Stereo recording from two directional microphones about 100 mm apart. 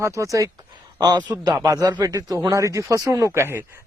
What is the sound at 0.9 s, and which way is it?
A man's voice, 45° right (ahead or behind).